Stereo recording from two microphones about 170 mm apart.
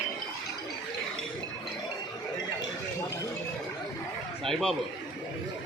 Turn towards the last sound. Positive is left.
turn(degrees=0)  # may be behind; listen again after turning